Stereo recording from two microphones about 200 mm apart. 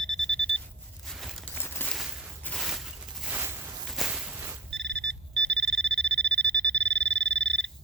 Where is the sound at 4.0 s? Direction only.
Centre (ahead or behind).